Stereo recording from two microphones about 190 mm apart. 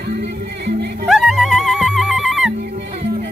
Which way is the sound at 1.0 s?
Centre (ahead or behind).